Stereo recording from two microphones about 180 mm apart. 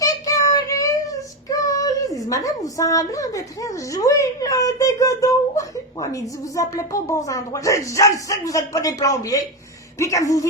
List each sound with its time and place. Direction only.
0.0 s child singing: 20° left (ahead or behind)
10.0 s speech: 20° left (ahead or behind)